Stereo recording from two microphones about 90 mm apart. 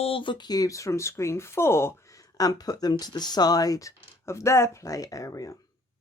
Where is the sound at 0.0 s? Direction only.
80° left; by 2.2 s 30° left (ahead or behind).